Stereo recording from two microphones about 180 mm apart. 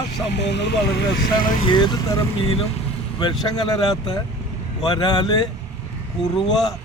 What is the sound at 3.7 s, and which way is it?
Speech, 20° left (ahead or behind).